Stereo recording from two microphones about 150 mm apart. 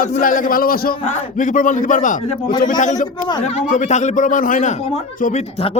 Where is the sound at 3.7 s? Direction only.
55° left (ahead or behind).